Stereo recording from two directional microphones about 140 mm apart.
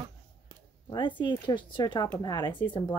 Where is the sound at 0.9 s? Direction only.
35° left (ahead or behind).